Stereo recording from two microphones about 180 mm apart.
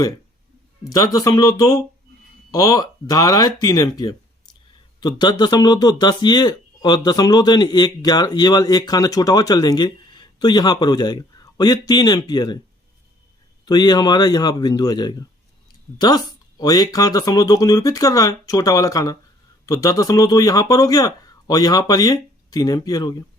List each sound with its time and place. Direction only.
0.9 s speech: 20° left (ahead or behind)
13.7 s speech: 20° left (ahead or behind)